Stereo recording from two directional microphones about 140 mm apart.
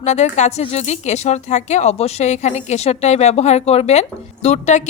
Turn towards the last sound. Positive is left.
turn(degrees=55)  # may be behind; listen again after turning